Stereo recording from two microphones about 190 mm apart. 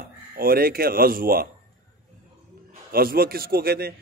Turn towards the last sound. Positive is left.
turn(degrees=-55)  # may be behind; listen again after turning